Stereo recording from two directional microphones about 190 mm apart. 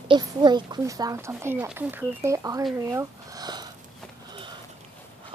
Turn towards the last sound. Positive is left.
turn(degrees=-20)  # may be behind; listen again after turning